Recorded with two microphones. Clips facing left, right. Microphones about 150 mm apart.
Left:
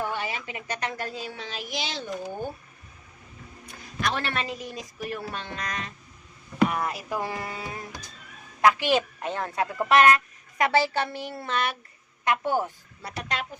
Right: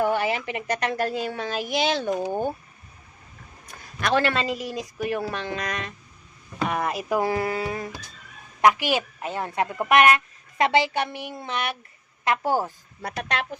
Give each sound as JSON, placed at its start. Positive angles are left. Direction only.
{"t": 0.0, "sound": "a woman's voice", "side_deg": -65}
{"t": 4.1, "sound": "speech", "side_deg": -90}
{"t": 6.7, "sound": "speech", "side_deg": -70}
{"t": 8.6, "sound": "a woman's voice", "side_deg": -10}
{"t": 9.7, "sound": "a woman's voice", "side_deg": -20}
{"t": 12.4, "sound": "a woman's voice", "side_deg": -35}
{"t": 13.0, "sound": "speech", "side_deg": -65}